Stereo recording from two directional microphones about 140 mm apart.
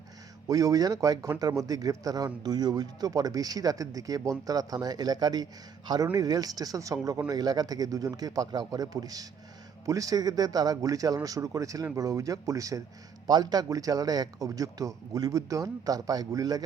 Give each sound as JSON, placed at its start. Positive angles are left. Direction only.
{"t": 0.4, "sound": "speech", "side_deg": -25}